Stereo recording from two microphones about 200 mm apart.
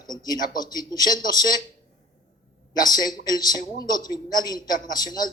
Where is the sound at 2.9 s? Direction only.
20° left (ahead or behind).